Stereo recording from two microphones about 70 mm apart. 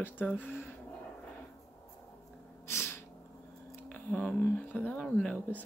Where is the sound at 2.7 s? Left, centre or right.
Left.